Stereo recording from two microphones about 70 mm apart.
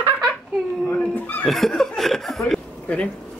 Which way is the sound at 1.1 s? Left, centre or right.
Left.